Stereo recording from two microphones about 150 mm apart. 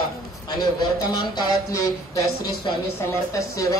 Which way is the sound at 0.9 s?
30° left (ahead or behind).